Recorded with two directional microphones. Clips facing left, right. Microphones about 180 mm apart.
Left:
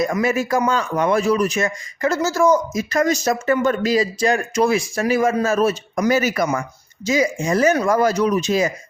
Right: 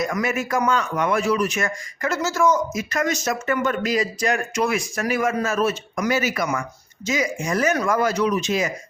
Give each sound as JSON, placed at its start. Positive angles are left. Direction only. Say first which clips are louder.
{"t": 0.0, "sound": "speech", "louder": "left 4 dB", "side_deg": 30}
{"t": 1.5, "sound": "speech", "louder": "left 4 dB", "side_deg": 25}